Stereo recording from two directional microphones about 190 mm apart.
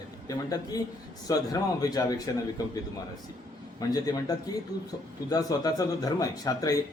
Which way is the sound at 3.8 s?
20° left (ahead or behind).